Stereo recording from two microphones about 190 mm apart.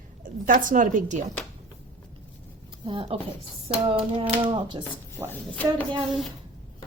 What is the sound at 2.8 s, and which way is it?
Typewriter, 25° right (ahead or behind).